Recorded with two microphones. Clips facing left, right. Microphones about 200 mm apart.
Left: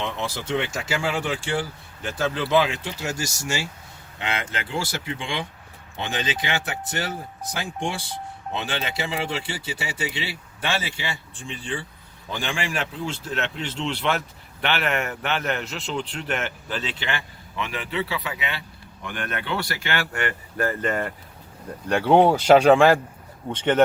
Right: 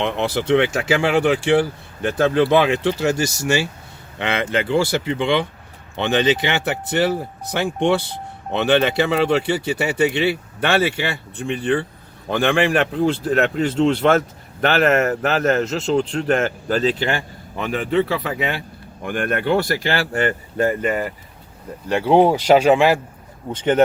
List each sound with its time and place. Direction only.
0.0 s speech: 65° right (ahead or behind)
13.7 s speech: 45° right (ahead or behind); by 20.7 s 25° right (ahead or behind)
20.8 s speech: 5° right (ahead or behind)